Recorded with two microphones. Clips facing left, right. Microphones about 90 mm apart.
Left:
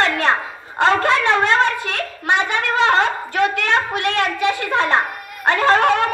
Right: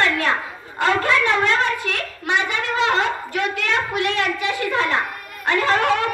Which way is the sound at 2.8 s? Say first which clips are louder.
Left 4 dB; 45° left (ahead or behind).